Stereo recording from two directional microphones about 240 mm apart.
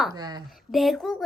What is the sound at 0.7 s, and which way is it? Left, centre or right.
Speech, centre.